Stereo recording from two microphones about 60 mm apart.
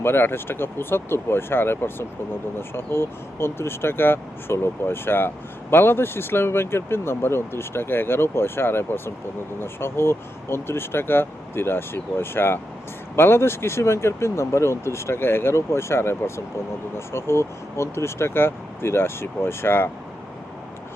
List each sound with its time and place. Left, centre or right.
0.0 s speech: left